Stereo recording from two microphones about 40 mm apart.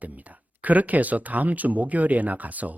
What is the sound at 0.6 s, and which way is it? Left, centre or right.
Speech, right.